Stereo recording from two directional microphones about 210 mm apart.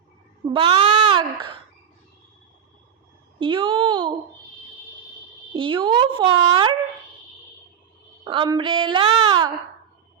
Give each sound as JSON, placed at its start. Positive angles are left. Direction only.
{"t": 0.5, "sound": "speech", "side_deg": -20}
{"t": 3.4, "sound": "a woman's voice", "side_deg": -25}
{"t": 5.5, "sound": "a woman's voice", "side_deg": -25}
{"t": 8.2, "sound": "a woman's voice", "side_deg": -20}